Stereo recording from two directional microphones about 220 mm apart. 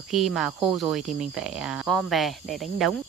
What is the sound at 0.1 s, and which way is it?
Speech, centre (ahead or behind).